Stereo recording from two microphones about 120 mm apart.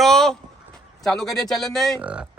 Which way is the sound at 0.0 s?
5° left (ahead or behind).